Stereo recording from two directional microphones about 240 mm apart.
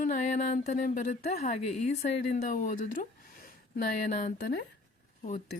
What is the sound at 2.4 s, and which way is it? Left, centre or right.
Speech, left.